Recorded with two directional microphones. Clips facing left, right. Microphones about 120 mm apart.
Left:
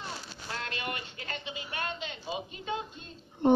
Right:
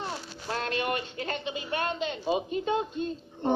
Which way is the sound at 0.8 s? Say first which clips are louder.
Right 7 dB; 35° right (ahead or behind).